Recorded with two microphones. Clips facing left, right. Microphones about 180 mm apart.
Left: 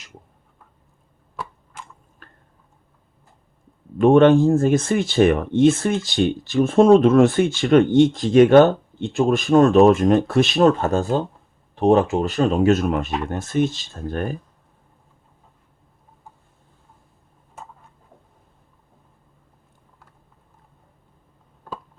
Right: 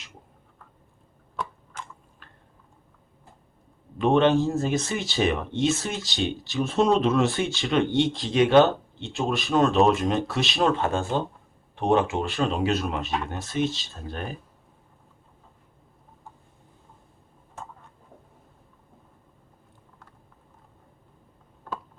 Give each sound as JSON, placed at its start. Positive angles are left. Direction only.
{"t": 3.9, "sound": "speech", "side_deg": 50}